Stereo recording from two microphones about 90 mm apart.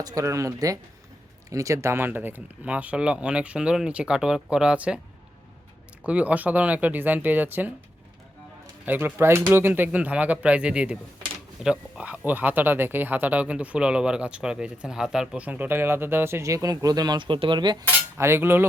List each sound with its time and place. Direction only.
0.0 s speech: 40° right (ahead or behind); by 4.9 s 10° right (ahead or behind)
6.0 s speech: 15° right (ahead or behind)
8.9 s speech: 20° right (ahead or behind); by 15.4 s 5° right (ahead or behind)
15.4 s speech: 20° right (ahead or behind); by 17.8 s 55° right (ahead or behind)
18.2 s cutlery: 25° right (ahead or behind)